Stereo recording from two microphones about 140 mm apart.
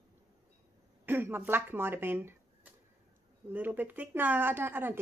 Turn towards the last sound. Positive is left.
turn(degrees=-15)  # may be behind; listen again after turning